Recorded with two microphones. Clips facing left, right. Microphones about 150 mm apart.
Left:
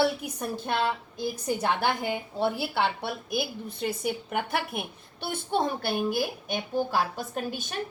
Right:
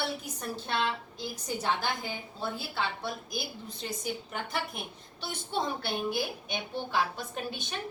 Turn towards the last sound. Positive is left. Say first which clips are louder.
# left 4 dB
turn(degrees=45)  # may be behind; listen again after turning